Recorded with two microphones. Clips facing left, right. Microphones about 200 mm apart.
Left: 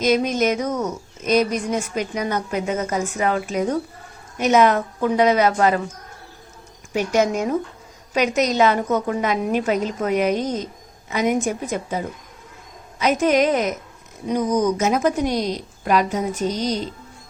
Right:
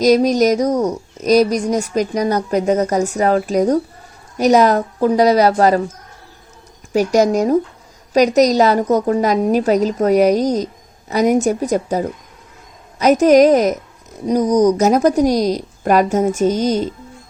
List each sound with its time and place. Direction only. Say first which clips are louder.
0.0 s speech: right 6 dB; 35° right (ahead or behind)
6.9 s speech: right 6 dB; 40° right (ahead or behind)